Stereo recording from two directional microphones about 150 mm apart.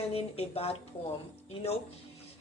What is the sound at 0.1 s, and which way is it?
Speech, 40° left (ahead or behind).